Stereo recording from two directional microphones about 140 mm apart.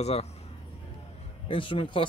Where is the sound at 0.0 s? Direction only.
50° left (ahead or behind).